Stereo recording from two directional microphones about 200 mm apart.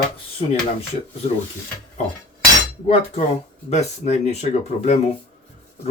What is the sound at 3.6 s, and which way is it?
Speech, 35° left (ahead or behind).